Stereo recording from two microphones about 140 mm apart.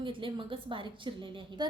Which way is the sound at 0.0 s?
35° right (ahead or behind).